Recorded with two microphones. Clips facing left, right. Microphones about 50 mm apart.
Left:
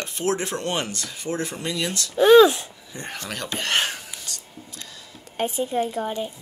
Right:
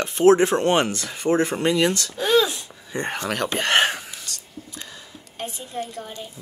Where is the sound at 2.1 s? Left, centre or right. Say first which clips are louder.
Left 10 dB; left.